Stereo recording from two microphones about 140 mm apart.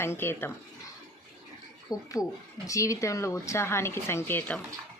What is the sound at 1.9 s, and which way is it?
A woman's voice, 25° left (ahead or behind).